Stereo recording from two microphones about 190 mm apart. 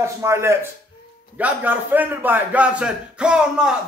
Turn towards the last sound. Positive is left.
turn(degrees=-5)  # may be behind; listen again after turning